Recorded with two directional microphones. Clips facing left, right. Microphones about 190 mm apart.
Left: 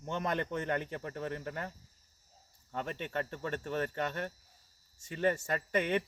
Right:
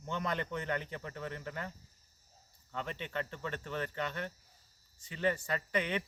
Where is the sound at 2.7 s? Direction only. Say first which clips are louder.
Left 2 dB; 45° left (ahead or behind).